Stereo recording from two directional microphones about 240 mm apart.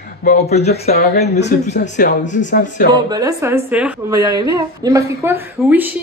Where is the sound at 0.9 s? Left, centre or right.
Left.